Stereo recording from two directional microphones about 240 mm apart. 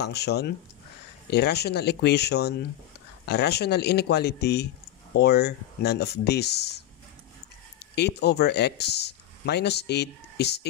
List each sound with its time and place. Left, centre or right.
0.0 s speech: left
7.9 s speech: left